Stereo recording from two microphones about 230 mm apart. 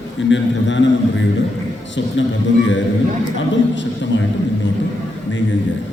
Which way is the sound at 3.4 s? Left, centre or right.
Left.